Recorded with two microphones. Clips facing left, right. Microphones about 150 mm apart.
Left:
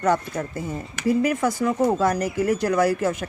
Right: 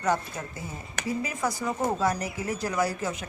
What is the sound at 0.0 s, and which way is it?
A woman's voice, 50° left (ahead or behind).